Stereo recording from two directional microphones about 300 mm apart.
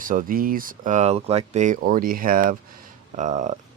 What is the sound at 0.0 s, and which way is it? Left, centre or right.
Speech, right.